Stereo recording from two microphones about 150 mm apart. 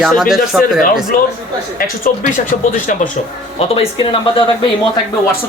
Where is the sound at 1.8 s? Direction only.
65° left (ahead or behind).